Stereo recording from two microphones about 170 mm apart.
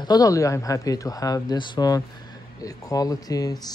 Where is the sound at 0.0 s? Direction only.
20° left (ahead or behind).